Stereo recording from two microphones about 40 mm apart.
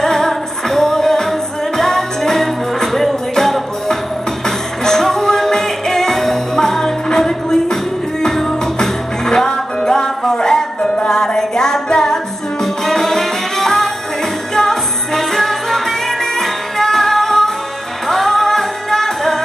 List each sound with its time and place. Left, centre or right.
0.0 s music: centre
9.5 s music: left